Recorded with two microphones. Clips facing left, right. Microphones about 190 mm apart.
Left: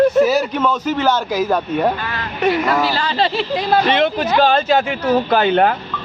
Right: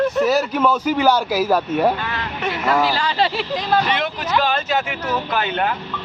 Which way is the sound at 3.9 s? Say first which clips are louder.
Left 6 dB; 25° left (ahead or behind).